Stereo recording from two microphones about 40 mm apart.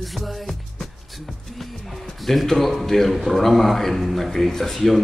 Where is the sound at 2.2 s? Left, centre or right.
Centre.